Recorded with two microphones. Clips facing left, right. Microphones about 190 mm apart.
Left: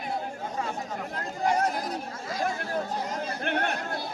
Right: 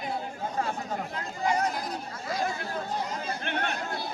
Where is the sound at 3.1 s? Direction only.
50° left (ahead or behind).